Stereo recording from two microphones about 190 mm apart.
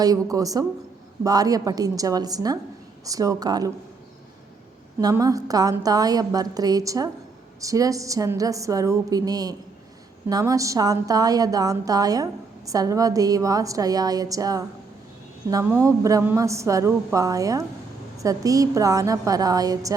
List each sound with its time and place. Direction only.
0.0 s a woman's voice: 20° right (ahead or behind)
4.9 s a woman's voice: 20° right (ahead or behind)